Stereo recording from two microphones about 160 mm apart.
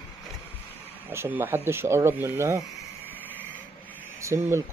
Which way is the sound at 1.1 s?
15° right (ahead or behind).